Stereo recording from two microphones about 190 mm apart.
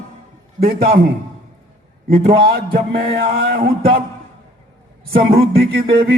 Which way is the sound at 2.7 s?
50° right (ahead or behind).